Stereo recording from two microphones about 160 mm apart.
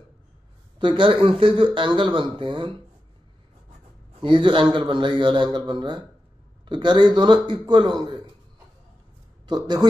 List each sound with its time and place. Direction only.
0.7 s speech: 30° right (ahead or behind)
4.2 s a man's voice: 30° right (ahead or behind)
9.5 s a man's voice: 25° right (ahead or behind)